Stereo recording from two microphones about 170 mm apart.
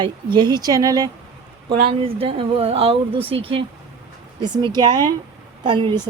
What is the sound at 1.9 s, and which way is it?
Speech, 35° right (ahead or behind).